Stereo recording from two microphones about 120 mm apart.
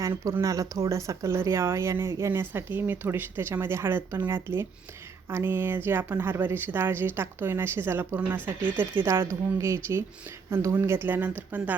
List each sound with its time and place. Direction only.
0.0 s speech: 20° right (ahead or behind)